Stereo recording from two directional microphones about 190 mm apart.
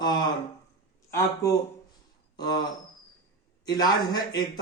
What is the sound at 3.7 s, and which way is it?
Speech, 20° left (ahead or behind).